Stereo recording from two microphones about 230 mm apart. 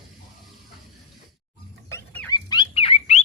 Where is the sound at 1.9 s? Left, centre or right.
Centre; by 3.2 s left.